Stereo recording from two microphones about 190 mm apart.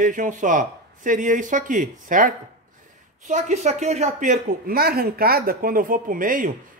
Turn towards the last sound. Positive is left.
turn(degrees=-45)  # may be behind; listen again after turning